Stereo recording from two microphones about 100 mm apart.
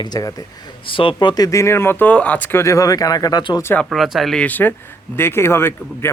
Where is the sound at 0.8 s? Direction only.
60° left (ahead or behind).